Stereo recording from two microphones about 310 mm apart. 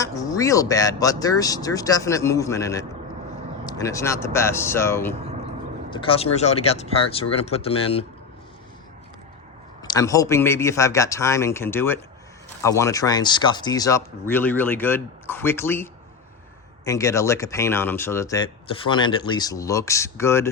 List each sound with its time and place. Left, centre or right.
0.0 s speech: centre
9.8 s speech: centre